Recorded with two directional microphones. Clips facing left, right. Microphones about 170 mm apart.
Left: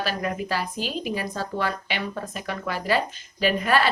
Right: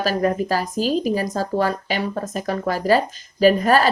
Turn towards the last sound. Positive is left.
turn(degrees=-40)  # may be behind; listen again after turning